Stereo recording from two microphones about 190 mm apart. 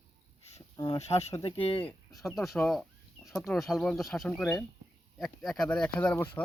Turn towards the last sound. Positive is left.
turn(degrees=10)  # may be behind; listen again after turning